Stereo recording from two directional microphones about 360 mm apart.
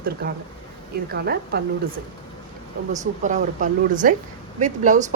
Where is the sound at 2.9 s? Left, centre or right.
Right.